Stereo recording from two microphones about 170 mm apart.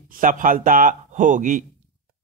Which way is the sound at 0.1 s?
50° right (ahead or behind).